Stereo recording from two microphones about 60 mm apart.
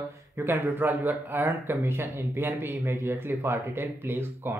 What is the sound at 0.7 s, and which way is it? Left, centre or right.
Speech, right.